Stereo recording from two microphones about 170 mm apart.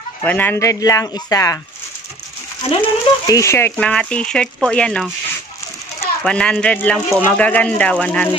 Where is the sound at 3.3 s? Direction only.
15° left (ahead or behind).